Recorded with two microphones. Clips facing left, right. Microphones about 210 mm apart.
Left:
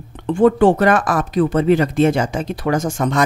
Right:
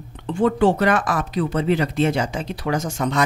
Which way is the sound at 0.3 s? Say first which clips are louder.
Left 5 dB; 50° left (ahead or behind).